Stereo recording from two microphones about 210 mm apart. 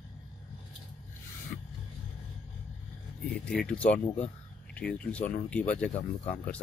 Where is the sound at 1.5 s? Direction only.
50° left (ahead or behind).